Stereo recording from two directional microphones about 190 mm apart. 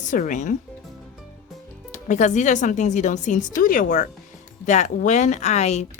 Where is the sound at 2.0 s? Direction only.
40° left (ahead or behind).